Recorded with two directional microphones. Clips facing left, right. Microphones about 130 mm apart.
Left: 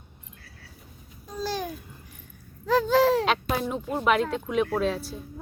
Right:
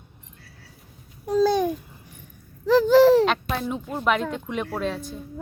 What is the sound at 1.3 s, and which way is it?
Speech, 65° right (ahead or behind).